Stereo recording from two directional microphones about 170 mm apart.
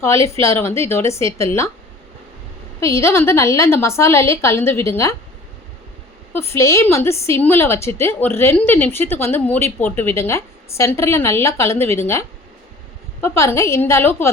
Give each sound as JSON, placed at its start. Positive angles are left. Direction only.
{"t": 0.0, "sound": "a woman's voice", "side_deg": 15}
{"t": 2.8, "sound": "a woman's voice", "side_deg": 15}
{"t": 6.3, "sound": "a woman's voice", "side_deg": 15}
{"t": 13.2, "sound": "a woman's voice", "side_deg": 15}